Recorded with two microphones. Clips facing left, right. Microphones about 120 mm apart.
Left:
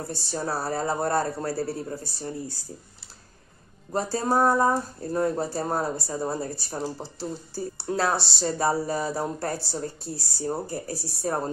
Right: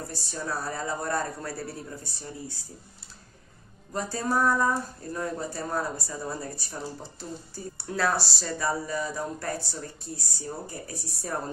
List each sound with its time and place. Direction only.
0.1 s speech: 30° left (ahead or behind)
3.9 s speech: 30° left (ahead or behind)